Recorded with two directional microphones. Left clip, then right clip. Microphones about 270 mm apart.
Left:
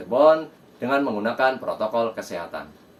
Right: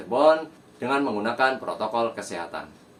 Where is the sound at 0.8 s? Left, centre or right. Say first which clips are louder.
Left 2 dB; centre.